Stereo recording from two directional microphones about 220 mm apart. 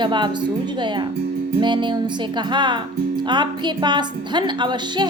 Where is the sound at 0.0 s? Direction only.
20° right (ahead or behind).